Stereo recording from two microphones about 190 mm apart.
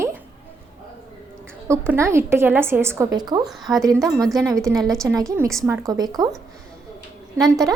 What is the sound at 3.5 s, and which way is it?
Speech, centre (ahead or behind).